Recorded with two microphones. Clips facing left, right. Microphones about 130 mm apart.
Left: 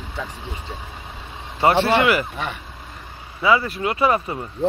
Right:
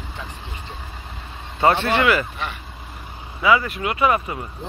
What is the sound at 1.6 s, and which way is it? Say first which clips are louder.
Speech: left 1 dB; 25° left (ahead or behind).